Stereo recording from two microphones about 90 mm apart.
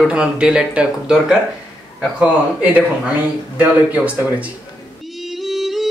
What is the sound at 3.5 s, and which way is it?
Speech, 15° right (ahead or behind).